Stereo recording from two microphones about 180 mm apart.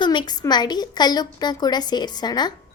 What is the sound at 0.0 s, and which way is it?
A child's voice, 25° left (ahead or behind).